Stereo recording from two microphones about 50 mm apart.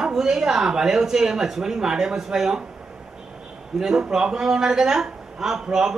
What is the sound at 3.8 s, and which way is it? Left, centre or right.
Speech, centre.